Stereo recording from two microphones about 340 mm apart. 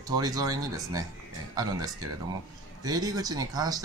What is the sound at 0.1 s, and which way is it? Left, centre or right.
Speech, centre.